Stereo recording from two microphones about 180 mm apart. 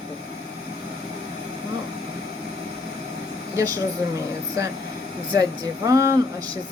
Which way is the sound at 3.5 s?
20° right (ahead or behind).